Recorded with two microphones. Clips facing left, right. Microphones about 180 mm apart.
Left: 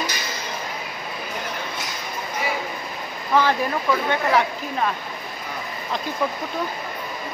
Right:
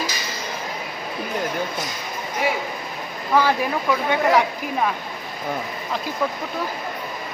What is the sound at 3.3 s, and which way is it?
Speech, 10° right (ahead or behind).